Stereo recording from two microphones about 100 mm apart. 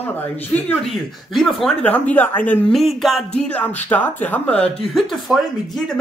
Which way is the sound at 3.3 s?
15° left (ahead or behind).